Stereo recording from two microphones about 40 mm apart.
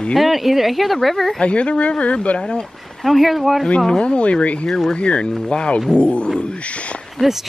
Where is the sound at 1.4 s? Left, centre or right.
Left.